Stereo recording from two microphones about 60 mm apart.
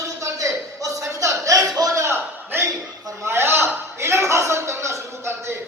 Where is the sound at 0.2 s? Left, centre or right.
Right.